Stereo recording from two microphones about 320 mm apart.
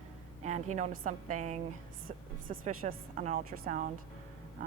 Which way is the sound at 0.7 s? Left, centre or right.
Right.